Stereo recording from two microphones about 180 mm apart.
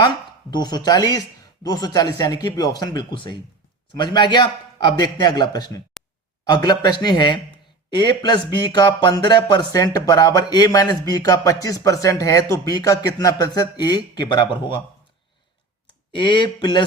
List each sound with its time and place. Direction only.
0.5 s speech: 25° left (ahead or behind)
16.2 s speech: 25° left (ahead or behind)